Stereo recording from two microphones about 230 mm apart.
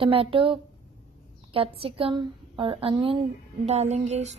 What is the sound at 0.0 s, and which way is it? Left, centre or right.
Speech, right.